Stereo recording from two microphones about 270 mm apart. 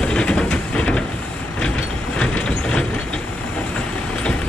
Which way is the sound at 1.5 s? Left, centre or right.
Centre.